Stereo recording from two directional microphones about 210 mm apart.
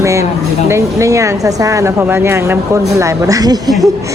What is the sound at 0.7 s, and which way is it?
Speech, 15° right (ahead or behind).